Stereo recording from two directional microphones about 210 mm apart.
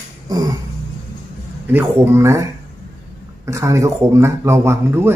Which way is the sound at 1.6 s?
10° right (ahead or behind).